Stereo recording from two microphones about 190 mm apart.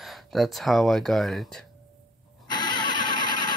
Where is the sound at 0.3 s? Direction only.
Centre (ahead or behind).